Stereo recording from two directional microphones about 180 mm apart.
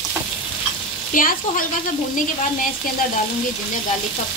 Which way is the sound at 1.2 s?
50° left (ahead or behind).